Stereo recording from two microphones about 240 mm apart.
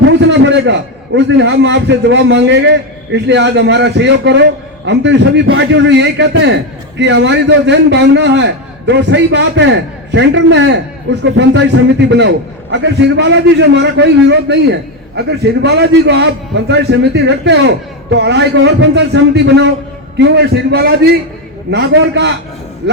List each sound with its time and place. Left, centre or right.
0.1 s a man's voice: right